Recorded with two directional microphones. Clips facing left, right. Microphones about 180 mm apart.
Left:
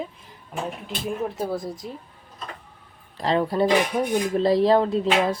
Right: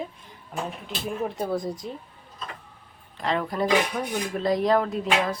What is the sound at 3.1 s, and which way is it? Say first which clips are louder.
Speech: left 5 dB; 30° left (ahead or behind).